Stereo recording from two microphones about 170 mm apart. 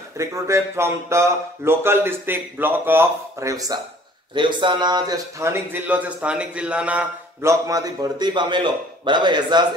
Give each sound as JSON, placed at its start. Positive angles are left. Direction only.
{"t": 0.2, "sound": "speech", "side_deg": -15}
{"t": 7.6, "sound": "a man's voice", "side_deg": -20}